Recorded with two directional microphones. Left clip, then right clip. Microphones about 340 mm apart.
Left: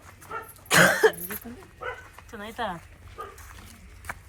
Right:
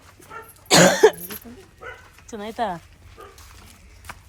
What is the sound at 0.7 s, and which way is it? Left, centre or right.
Cough, centre.